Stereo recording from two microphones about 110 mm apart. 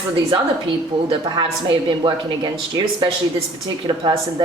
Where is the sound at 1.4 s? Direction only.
50° right (ahead or behind).